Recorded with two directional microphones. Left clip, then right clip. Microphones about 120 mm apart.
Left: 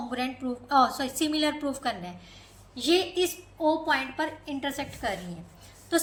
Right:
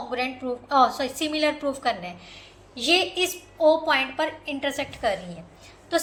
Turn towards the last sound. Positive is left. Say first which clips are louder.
# right 2 dB
turn(degrees=40)  # may be behind; listen again after turning